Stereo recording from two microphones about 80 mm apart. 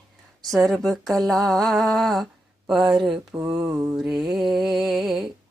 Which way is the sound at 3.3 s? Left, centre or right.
Right.